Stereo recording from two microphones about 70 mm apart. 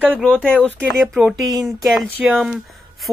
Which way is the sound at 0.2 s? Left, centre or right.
Centre.